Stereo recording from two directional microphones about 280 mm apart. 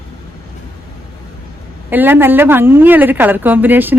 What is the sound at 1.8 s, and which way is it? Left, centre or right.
A woman's voice, centre.